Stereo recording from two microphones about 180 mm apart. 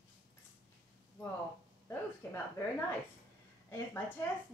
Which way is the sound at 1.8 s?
15° left (ahead or behind).